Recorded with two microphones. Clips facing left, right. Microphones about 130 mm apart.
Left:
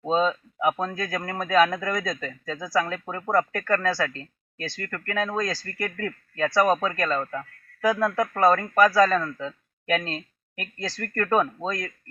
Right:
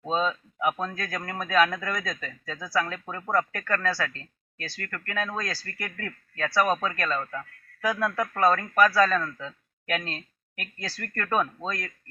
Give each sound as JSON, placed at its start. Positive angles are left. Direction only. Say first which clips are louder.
{"t": 0.0, "sound": "a sound", "louder": "left 4 dB", "side_deg": 20}
{"t": 0.8, "sound": "a man's voice", "louder": "left 3 dB", "side_deg": 15}
{"t": 10.9, "sound": "speech", "louder": "left 5 dB", "side_deg": -5}
{"t": 11.3, "sound": "a man's voice", "louder": "left 3 dB", "side_deg": 20}